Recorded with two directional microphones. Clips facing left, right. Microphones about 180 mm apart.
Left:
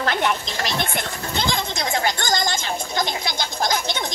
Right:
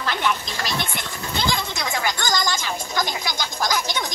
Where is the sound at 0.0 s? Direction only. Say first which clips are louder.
Left 3 dB; 55° left (ahead or behind).